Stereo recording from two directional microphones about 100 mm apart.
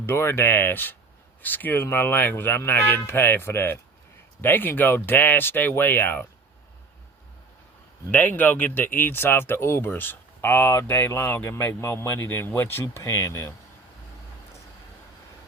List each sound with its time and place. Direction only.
0.0 s speech: 25° left (ahead or behind)
8.1 s speech: 15° left (ahead or behind)